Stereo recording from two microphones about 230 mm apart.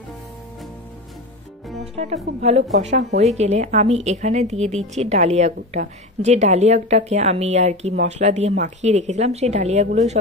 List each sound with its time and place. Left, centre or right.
2.4 s a woman's voice: right